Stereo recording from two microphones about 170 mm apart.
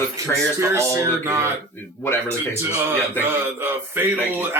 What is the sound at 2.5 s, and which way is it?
Speech, 15° right (ahead or behind).